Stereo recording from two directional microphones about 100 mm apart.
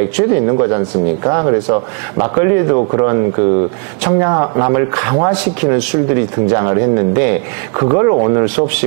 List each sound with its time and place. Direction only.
0.2 s speech: 25° right (ahead or behind)